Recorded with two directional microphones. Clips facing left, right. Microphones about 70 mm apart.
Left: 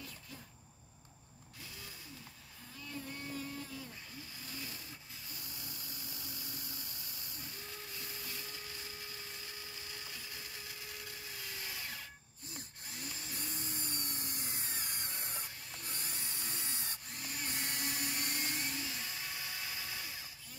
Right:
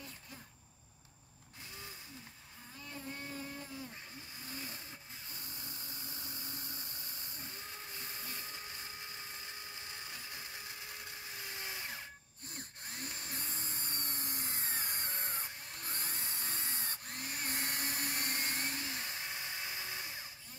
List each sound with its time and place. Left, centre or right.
2.9 s motorboat: right
4.5 s a sound: right
12.4 s tools: right